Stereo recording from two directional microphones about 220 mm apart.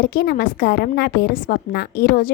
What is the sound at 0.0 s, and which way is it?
A woman's voice, 40° left (ahead or behind).